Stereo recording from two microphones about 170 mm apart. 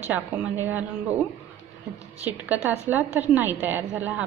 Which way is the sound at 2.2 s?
10° right (ahead or behind).